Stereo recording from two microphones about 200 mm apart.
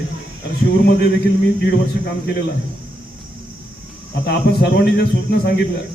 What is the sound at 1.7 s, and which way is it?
Speech, 55° left (ahead or behind).